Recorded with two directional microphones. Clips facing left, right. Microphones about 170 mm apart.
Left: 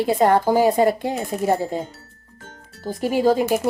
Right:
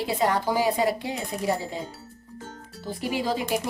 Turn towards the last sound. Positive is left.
turn(degrees=45)  # may be behind; listen again after turning